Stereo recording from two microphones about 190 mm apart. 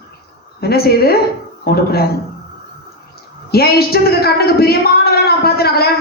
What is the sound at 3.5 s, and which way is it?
A woman's voice, 55° left (ahead or behind).